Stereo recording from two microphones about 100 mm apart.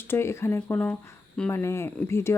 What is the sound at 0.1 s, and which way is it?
Speech, 25° left (ahead or behind).